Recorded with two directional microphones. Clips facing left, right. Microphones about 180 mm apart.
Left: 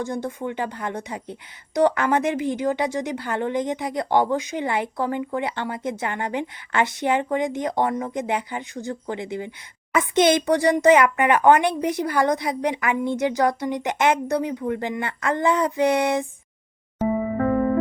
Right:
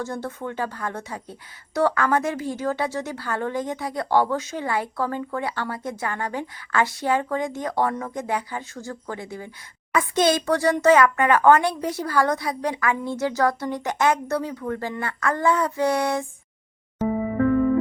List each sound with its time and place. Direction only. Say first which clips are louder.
0.0 s speech: left 2 dB; 15° left (ahead or behind)